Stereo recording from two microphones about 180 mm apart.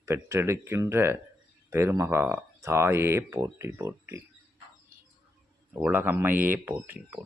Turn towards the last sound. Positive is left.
turn(degrees=-10)  # may be behind; listen again after turning